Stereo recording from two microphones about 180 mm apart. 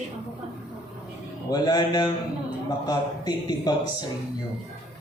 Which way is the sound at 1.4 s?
20° left (ahead or behind).